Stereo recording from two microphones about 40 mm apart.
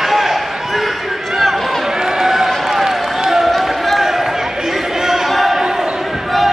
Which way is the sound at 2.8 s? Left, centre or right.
Centre.